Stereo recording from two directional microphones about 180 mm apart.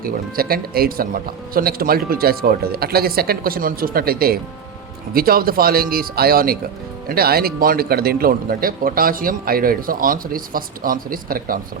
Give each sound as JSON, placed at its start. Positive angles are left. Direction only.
{"t": 0.0, "sound": "a man's voice", "side_deg": -55}